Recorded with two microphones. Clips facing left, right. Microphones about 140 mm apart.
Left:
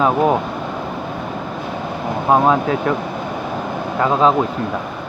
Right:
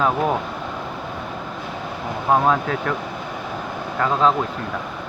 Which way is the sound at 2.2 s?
20° left (ahead or behind).